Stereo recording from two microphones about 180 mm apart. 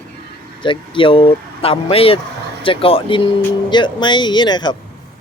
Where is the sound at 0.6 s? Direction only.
25° left (ahead or behind).